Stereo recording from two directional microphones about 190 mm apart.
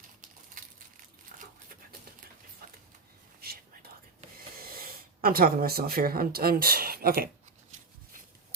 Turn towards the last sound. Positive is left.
turn(degrees=-50)  # may be behind; listen again after turning